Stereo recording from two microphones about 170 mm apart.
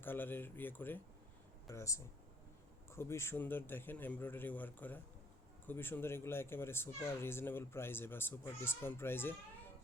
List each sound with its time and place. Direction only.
0.0 s speech: 10° left (ahead or behind)